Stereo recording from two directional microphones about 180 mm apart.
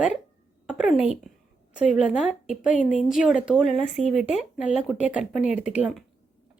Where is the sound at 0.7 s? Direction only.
5° right (ahead or behind).